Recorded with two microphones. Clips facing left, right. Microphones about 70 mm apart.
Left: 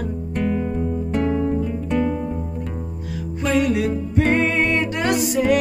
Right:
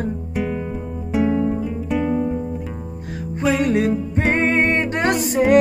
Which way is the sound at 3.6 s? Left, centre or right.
Right.